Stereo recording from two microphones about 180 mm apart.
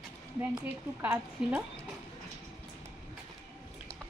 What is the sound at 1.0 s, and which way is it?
Speech, 10° right (ahead or behind).